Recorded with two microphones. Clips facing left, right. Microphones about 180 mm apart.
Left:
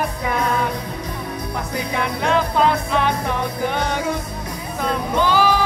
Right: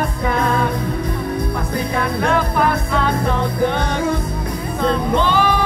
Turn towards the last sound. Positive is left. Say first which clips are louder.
# right 1 dB
turn(degrees=10)  # may be behind; listen again after turning